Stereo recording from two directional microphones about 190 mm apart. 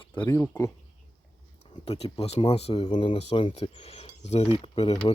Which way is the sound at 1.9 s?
30° left (ahead or behind).